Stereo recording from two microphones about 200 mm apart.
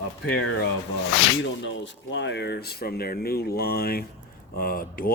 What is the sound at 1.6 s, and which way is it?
Speech, 65° left (ahead or behind).